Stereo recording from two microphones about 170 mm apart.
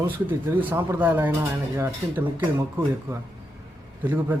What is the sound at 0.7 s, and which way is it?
A man's voice, 15° right (ahead or behind).